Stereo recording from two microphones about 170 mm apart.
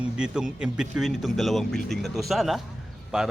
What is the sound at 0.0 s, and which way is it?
A man's voice, 5° right (ahead or behind).